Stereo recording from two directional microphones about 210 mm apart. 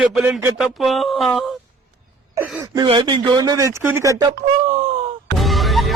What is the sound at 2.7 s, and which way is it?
Speech, 20° right (ahead or behind).